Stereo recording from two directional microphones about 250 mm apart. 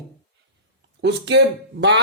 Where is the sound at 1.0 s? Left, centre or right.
Right.